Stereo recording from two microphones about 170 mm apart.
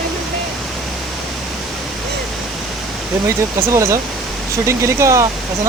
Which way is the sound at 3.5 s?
15° right (ahead or behind).